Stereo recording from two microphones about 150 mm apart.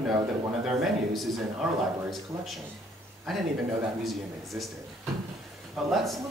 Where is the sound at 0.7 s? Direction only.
Centre (ahead or behind).